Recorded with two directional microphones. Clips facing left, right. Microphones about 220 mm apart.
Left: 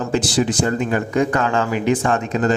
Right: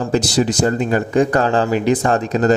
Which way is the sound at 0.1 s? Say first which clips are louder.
Right 2 dB; 40° right (ahead or behind).